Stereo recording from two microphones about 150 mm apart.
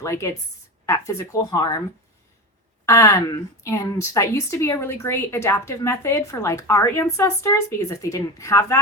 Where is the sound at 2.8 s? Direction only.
20° left (ahead or behind).